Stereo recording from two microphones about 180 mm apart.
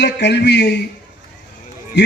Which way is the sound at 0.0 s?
70° left (ahead or behind).